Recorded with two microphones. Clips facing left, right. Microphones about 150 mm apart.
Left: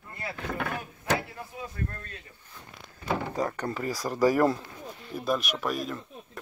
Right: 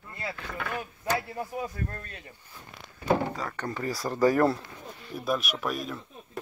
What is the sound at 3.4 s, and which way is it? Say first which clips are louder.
Speech: left 3 dB; 20° left (ahead or behind).